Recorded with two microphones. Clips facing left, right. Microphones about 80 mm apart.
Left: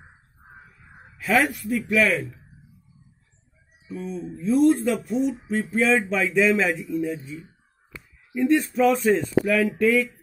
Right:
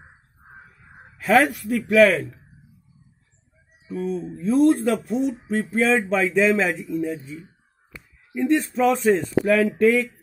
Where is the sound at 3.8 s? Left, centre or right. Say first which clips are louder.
Right 5 dB; right.